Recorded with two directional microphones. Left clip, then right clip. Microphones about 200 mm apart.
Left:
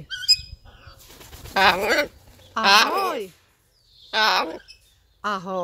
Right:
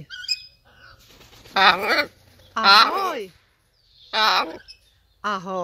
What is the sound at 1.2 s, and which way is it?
Bird, 40° left (ahead or behind).